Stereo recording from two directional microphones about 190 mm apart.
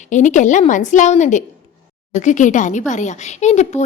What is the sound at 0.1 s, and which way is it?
Speech, 40° left (ahead or behind).